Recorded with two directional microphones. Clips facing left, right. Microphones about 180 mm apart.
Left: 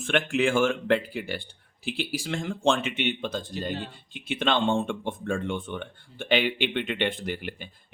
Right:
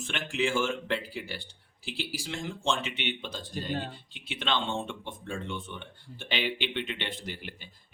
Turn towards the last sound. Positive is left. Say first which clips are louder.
# left 8 dB
turn(degrees=55)  # may be behind; listen again after turning